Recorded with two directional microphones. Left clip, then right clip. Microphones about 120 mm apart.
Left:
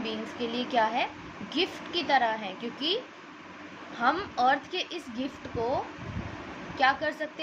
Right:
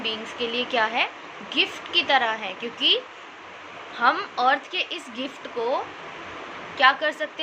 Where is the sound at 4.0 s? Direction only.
30° left (ahead or behind).